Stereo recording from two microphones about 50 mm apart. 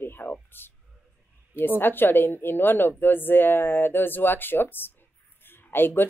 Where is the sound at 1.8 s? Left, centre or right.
Left.